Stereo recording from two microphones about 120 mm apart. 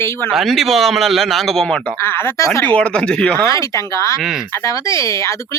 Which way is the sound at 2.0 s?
20° left (ahead or behind).